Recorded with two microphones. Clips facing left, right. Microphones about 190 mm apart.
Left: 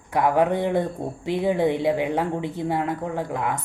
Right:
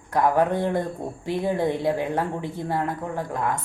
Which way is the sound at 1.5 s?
65° left (ahead or behind).